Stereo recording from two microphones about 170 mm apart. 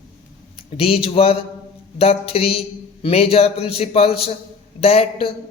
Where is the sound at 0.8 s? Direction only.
35° left (ahead or behind).